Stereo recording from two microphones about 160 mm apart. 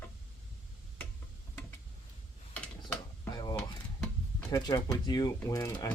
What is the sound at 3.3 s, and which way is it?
Mechanisms, 25° left (ahead or behind).